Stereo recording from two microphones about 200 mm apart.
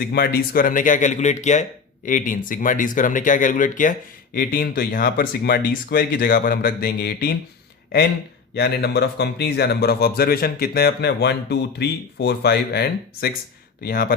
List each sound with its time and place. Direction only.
0.0 s speech: 50° left (ahead or behind)
8.5 s speech: 55° left (ahead or behind)